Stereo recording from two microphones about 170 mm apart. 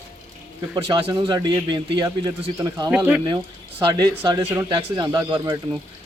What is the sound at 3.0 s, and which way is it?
Speech, 10° right (ahead or behind).